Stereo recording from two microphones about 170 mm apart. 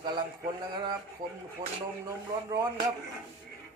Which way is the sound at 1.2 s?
25° right (ahead or behind).